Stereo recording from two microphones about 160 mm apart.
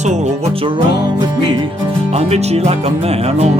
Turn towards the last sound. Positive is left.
turn(degrees=-40)  # may be behind; listen again after turning